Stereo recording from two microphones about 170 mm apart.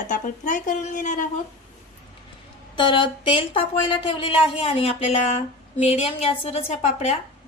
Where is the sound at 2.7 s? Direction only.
30° left (ahead or behind).